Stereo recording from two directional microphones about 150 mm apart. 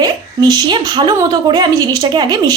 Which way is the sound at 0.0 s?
30° right (ahead or behind).